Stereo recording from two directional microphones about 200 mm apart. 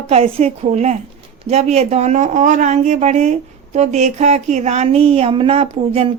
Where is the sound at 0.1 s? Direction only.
30° right (ahead or behind).